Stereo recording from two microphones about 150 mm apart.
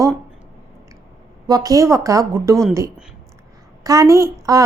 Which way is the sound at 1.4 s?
25° right (ahead or behind).